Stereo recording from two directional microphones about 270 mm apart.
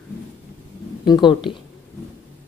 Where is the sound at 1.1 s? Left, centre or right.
Centre.